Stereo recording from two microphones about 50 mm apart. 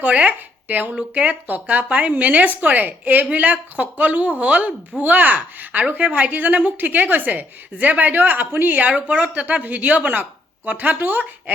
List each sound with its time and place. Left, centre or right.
0.0 s speech: right
9.0 s speech: right